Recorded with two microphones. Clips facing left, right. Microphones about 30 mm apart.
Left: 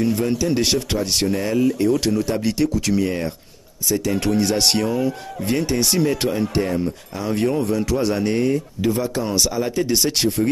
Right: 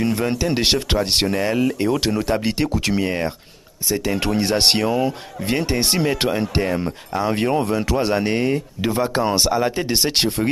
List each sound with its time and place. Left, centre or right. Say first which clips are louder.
0.0 s speech: left 1 dB; right